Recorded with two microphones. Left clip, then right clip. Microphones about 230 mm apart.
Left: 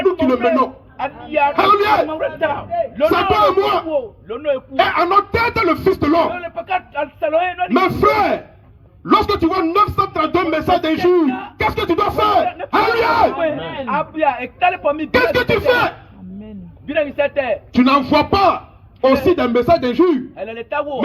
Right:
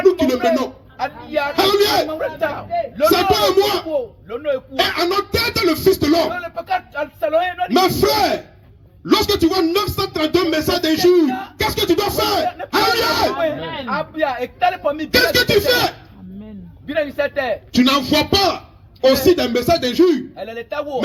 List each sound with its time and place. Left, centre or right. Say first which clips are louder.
0.0 s a sound: even; right
0.9 s a sound: left 3 dB; right
1.5 s music: left 1 dB; right
2.1 s speech: left 2 dB; right
3.1 s music: left 1 dB; right
6.4 s speech: left 1 dB; right
7.7 s music: left 1 dB; right
13.4 s speech: left 1 dB; right
15.1 s music: right 2 dB; right
16.9 s speech: left 2 dB; right
17.7 s music: left 2 dB; right
20.4 s speech: left 3 dB; right